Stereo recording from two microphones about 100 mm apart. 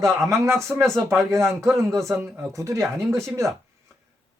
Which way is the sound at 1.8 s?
30° right (ahead or behind).